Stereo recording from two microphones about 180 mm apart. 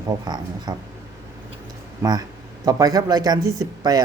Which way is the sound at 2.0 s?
20° right (ahead or behind).